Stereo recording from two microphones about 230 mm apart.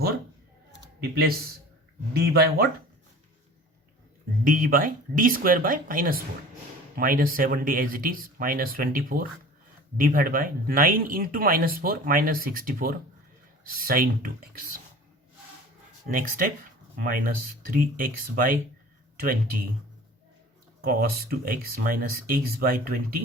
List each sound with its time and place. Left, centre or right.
0.8 s a sound: right
2.3 s speech: right
4.4 s speech: right
16.0 s speech: right
20.8 s speech: right